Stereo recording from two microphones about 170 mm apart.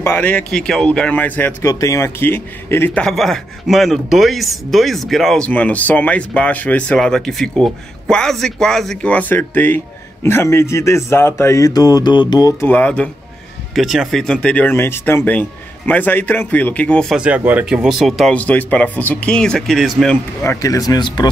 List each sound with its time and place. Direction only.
0.0 s speech: 10° left (ahead or behind)
20.4 s speech: 20° left (ahead or behind)